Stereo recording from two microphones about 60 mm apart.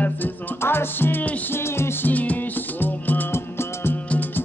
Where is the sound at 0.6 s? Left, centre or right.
Left.